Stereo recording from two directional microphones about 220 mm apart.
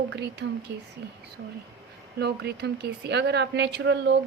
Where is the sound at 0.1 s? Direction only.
50° right (ahead or behind).